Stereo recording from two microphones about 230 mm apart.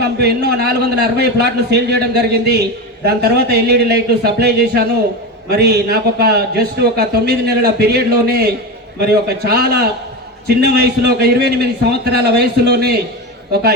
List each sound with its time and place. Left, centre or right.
0.0 s a man's voice: right